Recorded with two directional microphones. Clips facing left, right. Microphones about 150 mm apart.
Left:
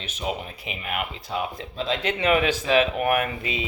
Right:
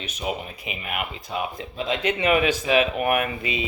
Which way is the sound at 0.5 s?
15° right (ahead or behind).